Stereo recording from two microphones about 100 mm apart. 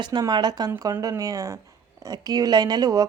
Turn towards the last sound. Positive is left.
turn(degrees=-40)  # may be behind; listen again after turning